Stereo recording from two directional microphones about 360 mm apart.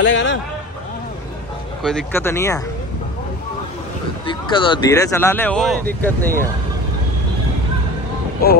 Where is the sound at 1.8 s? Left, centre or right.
Centre.